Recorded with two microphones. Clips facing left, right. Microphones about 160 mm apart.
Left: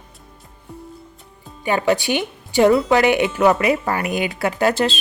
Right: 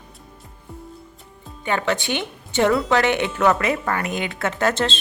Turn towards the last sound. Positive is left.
turn(degrees=15)  # may be behind; listen again after turning